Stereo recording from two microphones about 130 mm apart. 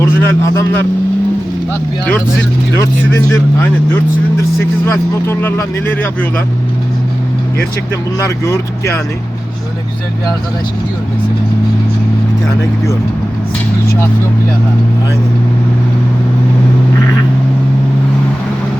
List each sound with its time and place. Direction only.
0.0 s speech: 15° left (ahead or behind)
3.3 s speech: 20° left (ahead or behind)
8.4 s speech: 20° left (ahead or behind)